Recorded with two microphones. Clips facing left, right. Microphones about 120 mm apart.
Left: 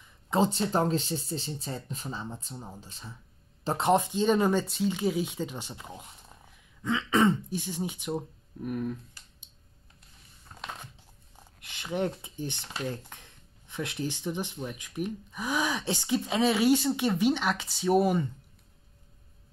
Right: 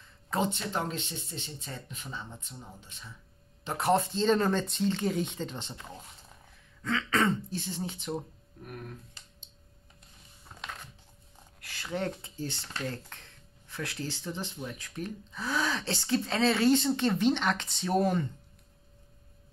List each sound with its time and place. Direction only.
0.3 s speech: 30° left (ahead or behind)
3.8 s speech: 15° left (ahead or behind)
11.6 s speech: 20° left (ahead or behind)